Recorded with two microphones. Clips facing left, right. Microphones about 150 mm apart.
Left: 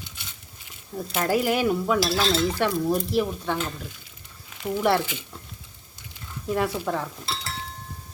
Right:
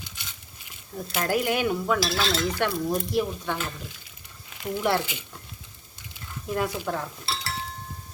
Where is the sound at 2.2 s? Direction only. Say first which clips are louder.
Left 3 dB; 25° left (ahead or behind).